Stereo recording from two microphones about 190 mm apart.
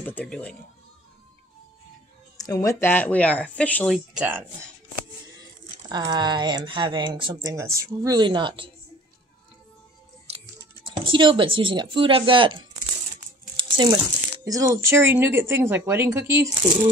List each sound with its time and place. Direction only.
0.0 s speech: 10° left (ahead or behind)
2.3 s speech: 20° left (ahead or behind); by 4.5 s 10° right (ahead or behind)
5.9 s a woman's voice: 20° right (ahead or behind)
10.9 s a woman's voice: 25° right (ahead or behind)
13.6 s crumpling: 25° right (ahead or behind)
14.4 s speech: 20° right (ahead or behind)